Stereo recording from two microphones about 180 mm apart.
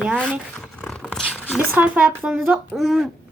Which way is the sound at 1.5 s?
10° right (ahead or behind).